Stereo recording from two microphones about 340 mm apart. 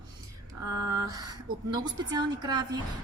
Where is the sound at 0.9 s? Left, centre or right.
Centre.